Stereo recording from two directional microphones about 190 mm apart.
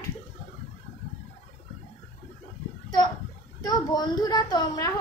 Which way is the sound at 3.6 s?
20° left (ahead or behind).